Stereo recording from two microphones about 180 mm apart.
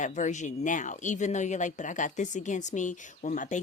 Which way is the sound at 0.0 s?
45° left (ahead or behind).